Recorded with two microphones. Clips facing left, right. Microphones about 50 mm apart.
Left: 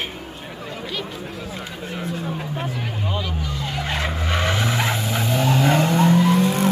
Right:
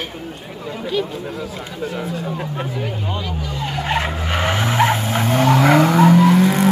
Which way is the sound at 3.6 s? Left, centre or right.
Right.